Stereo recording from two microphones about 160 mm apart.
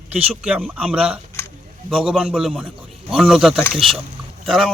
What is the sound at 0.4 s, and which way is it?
A man's voice, 5° right (ahead or behind).